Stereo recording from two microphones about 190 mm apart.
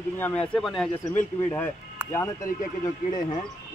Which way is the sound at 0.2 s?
5° left (ahead or behind).